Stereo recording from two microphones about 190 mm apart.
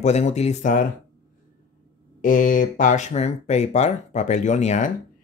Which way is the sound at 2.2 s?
45° left (ahead or behind).